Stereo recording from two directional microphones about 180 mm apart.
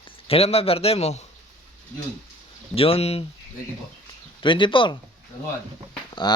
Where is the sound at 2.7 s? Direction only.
30° left (ahead or behind).